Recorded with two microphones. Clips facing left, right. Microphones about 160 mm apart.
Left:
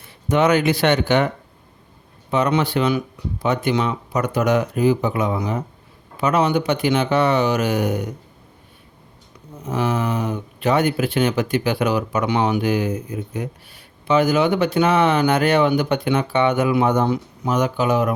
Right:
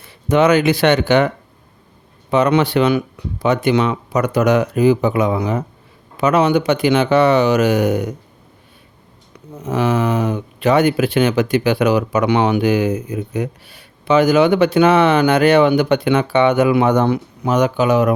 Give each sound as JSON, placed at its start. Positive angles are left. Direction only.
{"t": 0.3, "sound": "speech", "side_deg": -90}
{"t": 2.3, "sound": "speech", "side_deg": -75}
{"t": 9.6, "sound": "speech", "side_deg": -80}